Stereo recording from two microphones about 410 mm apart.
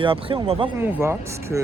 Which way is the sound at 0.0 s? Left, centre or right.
Centre.